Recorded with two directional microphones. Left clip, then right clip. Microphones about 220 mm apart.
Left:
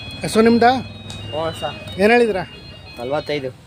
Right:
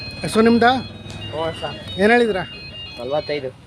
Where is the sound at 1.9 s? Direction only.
Centre (ahead or behind).